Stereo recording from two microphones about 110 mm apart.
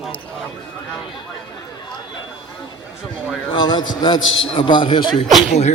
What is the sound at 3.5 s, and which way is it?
A man's voice, 50° left (ahead or behind).